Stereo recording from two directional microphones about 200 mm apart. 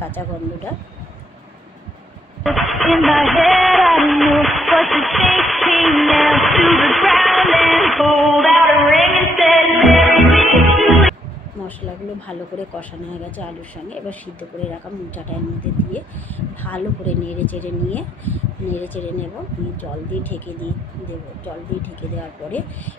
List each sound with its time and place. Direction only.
2.4 s music: centre (ahead or behind)
15.1 s speech: 10° left (ahead or behind)
19.8 s speech: 10° left (ahead or behind)